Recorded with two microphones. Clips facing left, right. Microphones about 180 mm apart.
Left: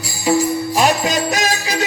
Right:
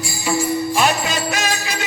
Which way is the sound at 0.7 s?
40° left (ahead or behind).